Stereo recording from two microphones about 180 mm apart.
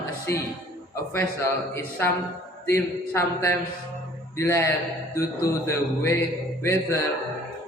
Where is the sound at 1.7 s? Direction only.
15° left (ahead or behind).